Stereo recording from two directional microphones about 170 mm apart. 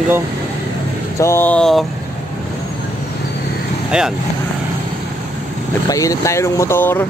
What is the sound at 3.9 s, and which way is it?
Speech, 5° right (ahead or behind).